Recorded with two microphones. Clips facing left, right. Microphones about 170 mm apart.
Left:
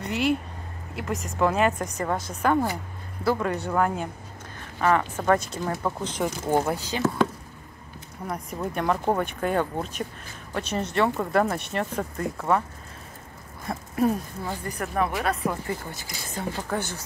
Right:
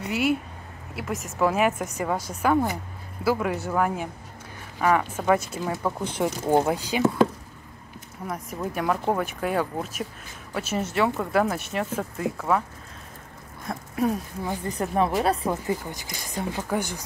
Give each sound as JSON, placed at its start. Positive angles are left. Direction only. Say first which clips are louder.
{"t": 0.0, "sound": "speech", "louder": "even", "side_deg": -5}
{"t": 8.3, "sound": "speech", "louder": "even", "side_deg": 0}
{"t": 13.7, "sound": "speech", "louder": "left 1 dB", "side_deg": 0}
{"t": 14.4, "sound": "speech", "louder": "right 3 dB", "side_deg": -20}